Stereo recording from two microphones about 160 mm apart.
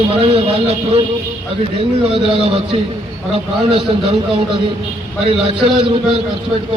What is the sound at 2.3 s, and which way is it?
A man's voice, 35° right (ahead or behind).